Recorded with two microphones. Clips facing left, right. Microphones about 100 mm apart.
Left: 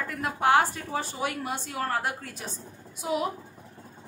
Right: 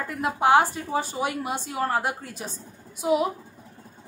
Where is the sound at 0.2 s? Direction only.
15° right (ahead or behind).